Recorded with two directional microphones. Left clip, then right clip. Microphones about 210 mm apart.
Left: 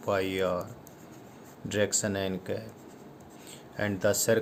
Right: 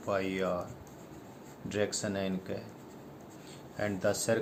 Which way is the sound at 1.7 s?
50° left (ahead or behind).